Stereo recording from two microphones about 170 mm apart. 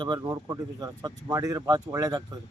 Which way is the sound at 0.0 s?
25° right (ahead or behind).